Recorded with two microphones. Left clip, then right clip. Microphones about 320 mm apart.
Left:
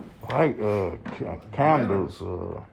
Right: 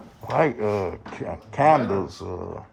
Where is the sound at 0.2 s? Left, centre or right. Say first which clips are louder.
Right 2 dB; centre.